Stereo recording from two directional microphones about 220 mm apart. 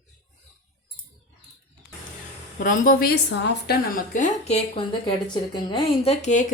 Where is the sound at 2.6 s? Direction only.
40° left (ahead or behind).